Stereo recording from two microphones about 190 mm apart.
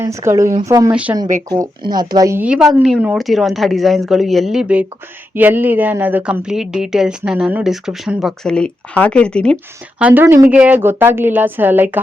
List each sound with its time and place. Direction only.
0.0 s a woman's voice: 15° right (ahead or behind)
1.5 s a woman's voice: 20° right (ahead or behind); by 9.6 s 5° left (ahead or behind)
10.0 s a woman's voice: 10° right (ahead or behind)